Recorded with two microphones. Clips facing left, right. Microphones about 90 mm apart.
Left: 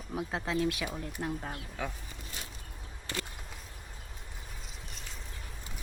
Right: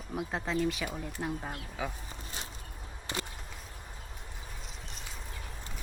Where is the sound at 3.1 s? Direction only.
20° right (ahead or behind).